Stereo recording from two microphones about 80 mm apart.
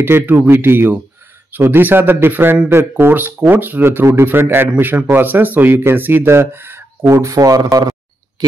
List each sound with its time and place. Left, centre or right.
0.0 s speech: right
7.3 s speech: right